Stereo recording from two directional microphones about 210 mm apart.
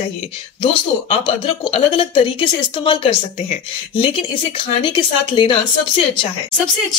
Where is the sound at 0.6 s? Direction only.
25° left (ahead or behind).